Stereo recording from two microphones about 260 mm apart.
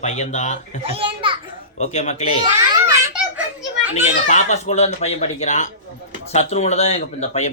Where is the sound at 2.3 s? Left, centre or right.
Centre.